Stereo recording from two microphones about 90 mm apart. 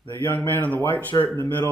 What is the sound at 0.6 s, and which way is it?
Speech, 20° left (ahead or behind).